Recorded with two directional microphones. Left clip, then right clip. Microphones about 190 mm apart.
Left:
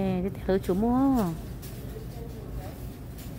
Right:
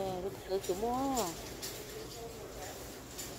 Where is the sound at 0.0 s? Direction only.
35° left (ahead or behind).